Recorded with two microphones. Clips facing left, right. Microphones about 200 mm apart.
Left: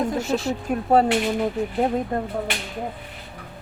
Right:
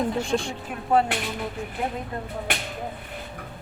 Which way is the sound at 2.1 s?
50° left (ahead or behind).